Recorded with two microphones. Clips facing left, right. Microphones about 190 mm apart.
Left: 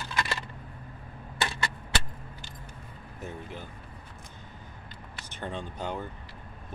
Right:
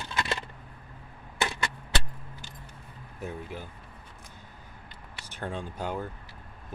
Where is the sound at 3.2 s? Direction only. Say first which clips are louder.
Right 2 dB; 10° right (ahead or behind).